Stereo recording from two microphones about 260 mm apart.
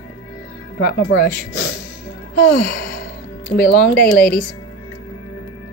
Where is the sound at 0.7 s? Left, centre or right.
Left.